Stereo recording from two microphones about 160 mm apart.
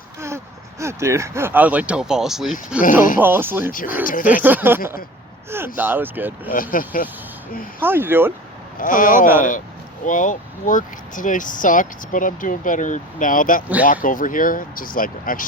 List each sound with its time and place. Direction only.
0.2 s speech: 15° right (ahead or behind)
3.7 s speech: 60° left (ahead or behind)
4.4 s speech: 10° right (ahead or behind)
6.5 s speech: 60° left (ahead or behind)
7.8 s speech: 15° right (ahead or behind)
8.8 s speech: 60° left (ahead or behind)